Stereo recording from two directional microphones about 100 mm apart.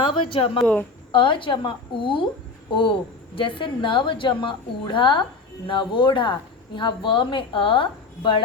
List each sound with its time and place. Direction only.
0.0 s a woman's voice: 60° left (ahead or behind)